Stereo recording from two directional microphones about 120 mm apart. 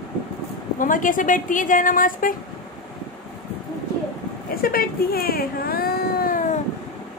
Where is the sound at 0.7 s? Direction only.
90° left.